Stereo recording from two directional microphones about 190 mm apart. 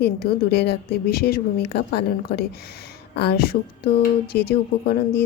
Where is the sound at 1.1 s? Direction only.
55° left (ahead or behind).